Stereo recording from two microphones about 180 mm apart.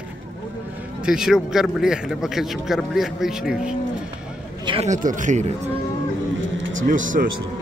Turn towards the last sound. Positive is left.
turn(degrees=-45)  # may be behind; listen again after turning